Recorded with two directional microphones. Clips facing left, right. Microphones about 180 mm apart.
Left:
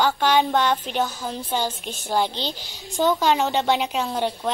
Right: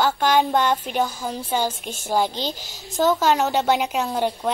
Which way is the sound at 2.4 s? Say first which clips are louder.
Right 2 dB; 45° right (ahead or behind).